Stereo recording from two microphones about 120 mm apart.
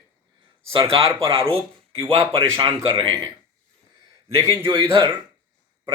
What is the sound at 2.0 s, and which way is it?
Speech, 45° right (ahead or behind).